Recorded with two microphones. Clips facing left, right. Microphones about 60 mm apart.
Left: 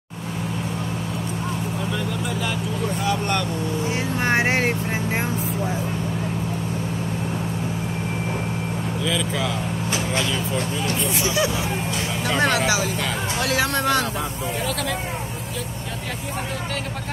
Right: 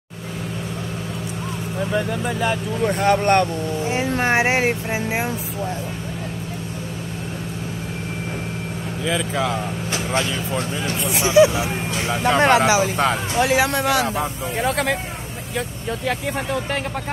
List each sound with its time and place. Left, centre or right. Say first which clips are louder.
3.0 s speech: right 9 dB; right
3.9 s speech: right 3 dB; centre
9.0 s speech: right 3 dB; right
11.2 s speech: right 11 dB; right
14.6 s speech: right 7 dB; right